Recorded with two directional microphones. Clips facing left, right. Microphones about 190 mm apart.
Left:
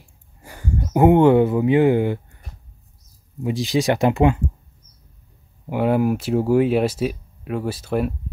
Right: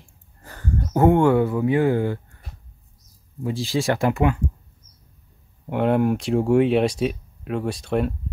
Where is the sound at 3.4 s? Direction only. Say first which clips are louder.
Left 3 dB; 20° left (ahead or behind).